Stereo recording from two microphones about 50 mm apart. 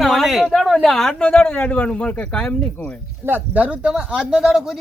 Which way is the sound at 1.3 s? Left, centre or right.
Left.